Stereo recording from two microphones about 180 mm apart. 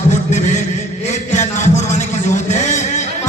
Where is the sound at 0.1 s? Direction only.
40° left (ahead or behind).